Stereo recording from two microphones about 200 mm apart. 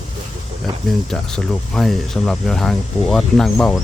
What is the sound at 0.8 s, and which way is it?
Speech, 5° left (ahead or behind).